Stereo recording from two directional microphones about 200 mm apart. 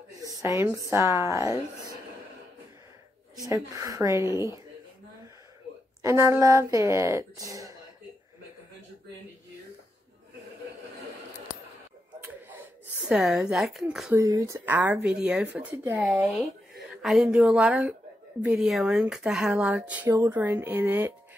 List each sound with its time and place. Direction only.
0.3 s speech: 15° right (ahead or behind)
3.4 s speech: 15° right (ahead or behind)
6.0 s speech: 15° right (ahead or behind)
13.0 s speech: 5° right (ahead or behind)
14.1 s speech: 15° right (ahead or behind)